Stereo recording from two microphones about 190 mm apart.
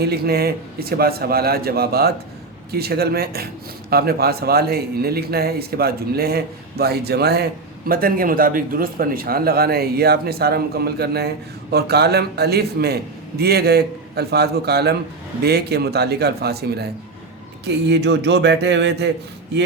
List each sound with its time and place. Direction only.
0.0 s a man's voice: 55° right (ahead or behind)